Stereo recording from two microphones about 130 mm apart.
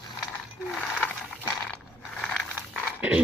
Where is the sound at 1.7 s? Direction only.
10° left (ahead or behind).